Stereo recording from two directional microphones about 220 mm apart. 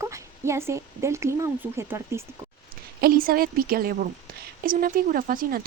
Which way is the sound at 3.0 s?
40° right (ahead or behind).